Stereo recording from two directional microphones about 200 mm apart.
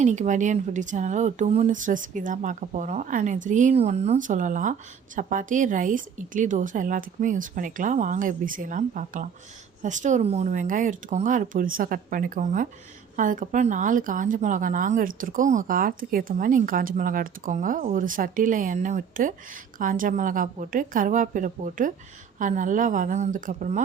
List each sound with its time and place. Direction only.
0.0 s a woman's voice: 35° right (ahead or behind)